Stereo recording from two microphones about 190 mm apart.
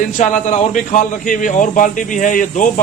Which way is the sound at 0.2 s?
40° left (ahead or behind).